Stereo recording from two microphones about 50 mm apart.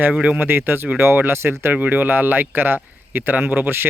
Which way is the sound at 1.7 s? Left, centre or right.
Right.